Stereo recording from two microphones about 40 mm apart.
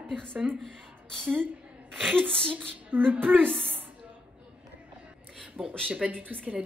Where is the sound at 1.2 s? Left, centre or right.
Right.